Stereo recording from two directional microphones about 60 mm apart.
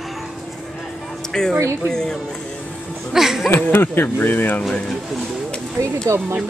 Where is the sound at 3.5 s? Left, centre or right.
Left.